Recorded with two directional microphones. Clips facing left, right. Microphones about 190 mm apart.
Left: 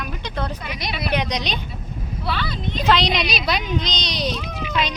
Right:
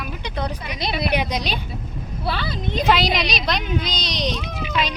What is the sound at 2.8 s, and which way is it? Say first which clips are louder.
Speech: even; 5° right (ahead or behind).